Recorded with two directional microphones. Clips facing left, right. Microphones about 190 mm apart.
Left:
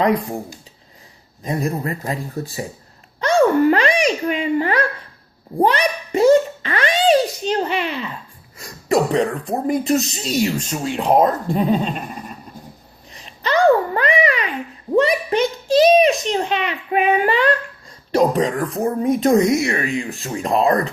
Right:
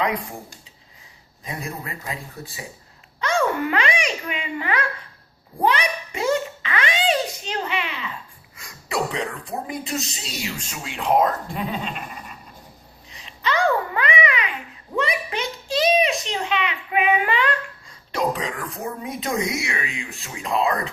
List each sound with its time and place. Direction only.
0.0 s speech: 40° left (ahead or behind)
1.5 s speech: 45° left (ahead or behind)
3.2 s babbling: 40° left (ahead or behind)
5.5 s a sound: 40° left (ahead or behind)
8.5 s speech: 45° left (ahead or behind)
13.1 s babbling: 45° left (ahead or behind)
18.1 s speech: 45° left (ahead or behind)